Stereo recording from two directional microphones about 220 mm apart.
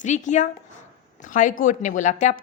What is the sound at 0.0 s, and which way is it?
A woman's voice, 35° left (ahead or behind).